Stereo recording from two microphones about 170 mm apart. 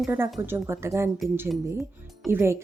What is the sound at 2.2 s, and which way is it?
Speech, 15° right (ahead or behind).